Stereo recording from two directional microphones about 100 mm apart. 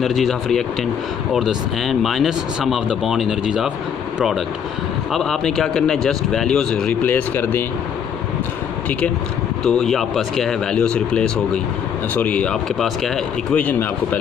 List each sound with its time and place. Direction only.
0.0 s speech: centre (ahead or behind)
5.1 s a man's voice: 5° left (ahead or behind); by 7.6 s 20° left (ahead or behind)
9.7 s a man's voice: 5° left (ahead or behind)
13.6 s a man's voice: 15° left (ahead or behind)